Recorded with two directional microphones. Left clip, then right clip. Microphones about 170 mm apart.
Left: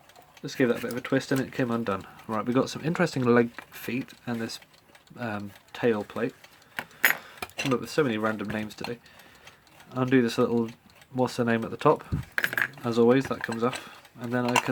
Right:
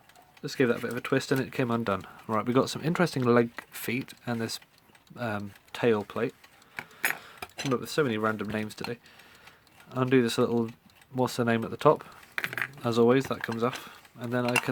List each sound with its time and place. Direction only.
0.4 s speech: 50° right (ahead or behind)
6.7 s keys jangling: centre (ahead or behind)
7.3 s cutlery: 5° right (ahead or behind)
7.8 s speech: 35° right (ahead or behind)
9.9 s speech: 40° right (ahead or behind)
12.4 s cutlery: 5° left (ahead or behind)
12.8 s speech: 40° right (ahead or behind)
13.8 s cutlery: 35° right (ahead or behind)